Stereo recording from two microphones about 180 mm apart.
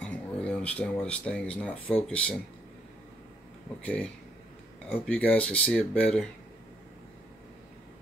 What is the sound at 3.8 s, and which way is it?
Speech, 5° left (ahead or behind).